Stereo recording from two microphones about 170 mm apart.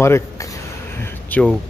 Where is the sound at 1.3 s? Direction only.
10° left (ahead or behind).